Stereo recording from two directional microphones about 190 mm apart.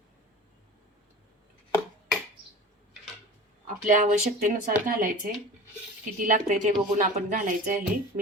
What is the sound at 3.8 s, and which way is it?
Speech, 40° right (ahead or behind).